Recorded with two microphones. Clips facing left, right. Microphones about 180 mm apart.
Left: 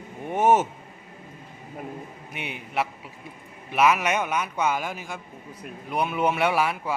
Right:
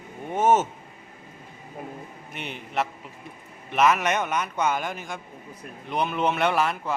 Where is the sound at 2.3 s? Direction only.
10° left (ahead or behind).